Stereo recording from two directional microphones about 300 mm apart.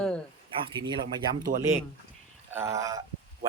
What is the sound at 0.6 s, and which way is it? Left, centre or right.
Speech, centre.